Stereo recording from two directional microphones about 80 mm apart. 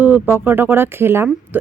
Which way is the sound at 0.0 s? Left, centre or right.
Right.